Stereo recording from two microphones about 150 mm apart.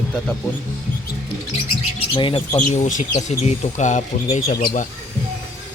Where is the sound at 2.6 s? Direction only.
55° left (ahead or behind).